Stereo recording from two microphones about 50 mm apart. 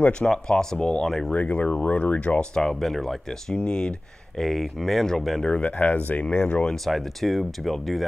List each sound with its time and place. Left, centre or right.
0.3 s speech: centre
1.3 s speech: left
2.5 s speech: centre
4.4 s speech: centre
5.5 s speech: left
6.7 s speech: centre